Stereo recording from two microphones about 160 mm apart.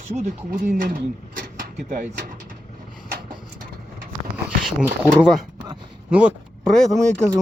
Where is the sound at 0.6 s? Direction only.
60° right (ahead or behind).